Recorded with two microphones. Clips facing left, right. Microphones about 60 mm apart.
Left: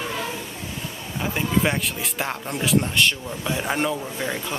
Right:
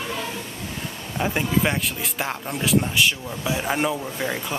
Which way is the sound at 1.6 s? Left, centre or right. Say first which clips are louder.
Even; centre.